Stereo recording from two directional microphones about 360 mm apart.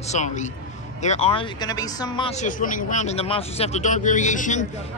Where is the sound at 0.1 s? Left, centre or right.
Centre.